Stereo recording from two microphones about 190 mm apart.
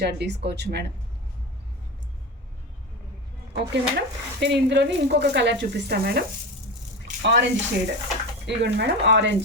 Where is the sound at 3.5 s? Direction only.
60° right (ahead or behind).